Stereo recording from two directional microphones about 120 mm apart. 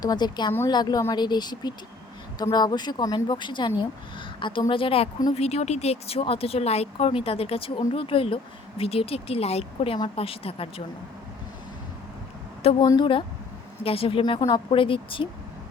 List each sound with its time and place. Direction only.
0.0 s a woman's voice: 35° left (ahead or behind)
5.3 s a woman's voice: 60° left (ahead or behind)
12.8 s a woman's voice: 35° left (ahead or behind)